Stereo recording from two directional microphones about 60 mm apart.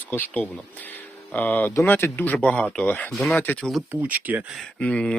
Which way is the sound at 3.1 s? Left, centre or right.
Centre.